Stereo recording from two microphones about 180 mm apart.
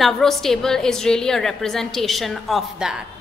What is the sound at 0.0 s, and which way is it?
A woman's voice, centre (ahead or behind).